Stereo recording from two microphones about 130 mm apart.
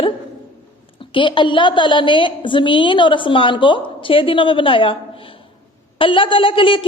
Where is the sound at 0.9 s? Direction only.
40° left (ahead or behind).